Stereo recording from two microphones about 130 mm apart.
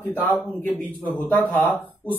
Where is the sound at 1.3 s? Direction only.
10° left (ahead or behind).